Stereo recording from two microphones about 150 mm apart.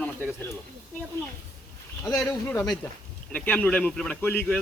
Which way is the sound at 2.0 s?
15° left (ahead or behind).